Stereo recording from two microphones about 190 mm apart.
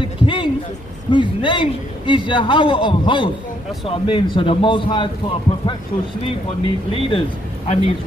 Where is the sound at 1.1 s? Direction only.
25° left (ahead or behind).